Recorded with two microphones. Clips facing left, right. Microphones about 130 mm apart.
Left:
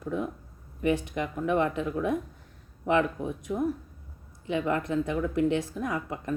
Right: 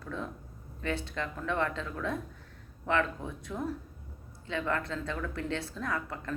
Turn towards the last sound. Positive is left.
turn(degrees=15)  # may be behind; listen again after turning